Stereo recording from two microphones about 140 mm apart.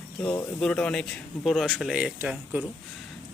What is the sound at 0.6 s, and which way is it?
Speech, 5° left (ahead or behind).